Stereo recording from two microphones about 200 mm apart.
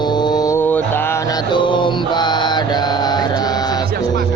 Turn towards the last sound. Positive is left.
turn(degrees=20)  # may be behind; listen again after turning